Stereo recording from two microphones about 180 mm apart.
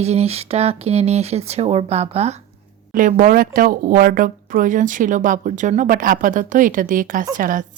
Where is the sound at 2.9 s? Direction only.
50° right (ahead or behind).